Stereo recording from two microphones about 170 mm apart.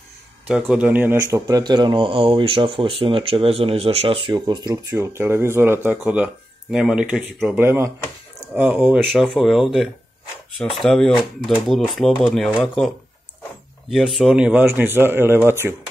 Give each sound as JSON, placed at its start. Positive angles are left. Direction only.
{"t": 0.5, "sound": "speech", "side_deg": -5}